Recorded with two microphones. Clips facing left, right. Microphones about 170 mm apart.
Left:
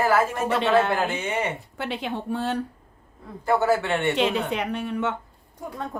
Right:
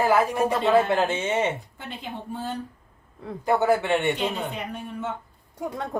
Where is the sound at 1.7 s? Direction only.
80° left.